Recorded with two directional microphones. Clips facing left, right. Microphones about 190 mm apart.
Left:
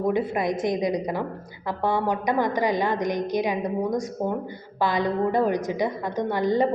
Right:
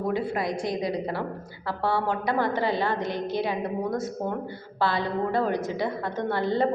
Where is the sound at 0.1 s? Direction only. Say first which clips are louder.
Left 3 dB; 20° left (ahead or behind).